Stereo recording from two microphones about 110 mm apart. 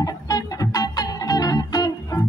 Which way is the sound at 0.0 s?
35° left (ahead or behind).